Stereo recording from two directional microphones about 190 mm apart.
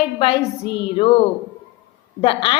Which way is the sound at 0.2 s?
25° left (ahead or behind).